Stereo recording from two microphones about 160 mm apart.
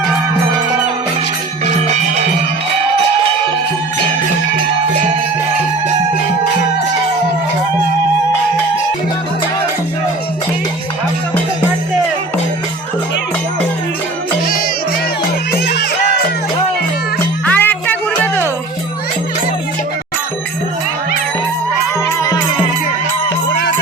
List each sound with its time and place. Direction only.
15.5 s music: 90° left
17.4 s music: 10° left (ahead or behind)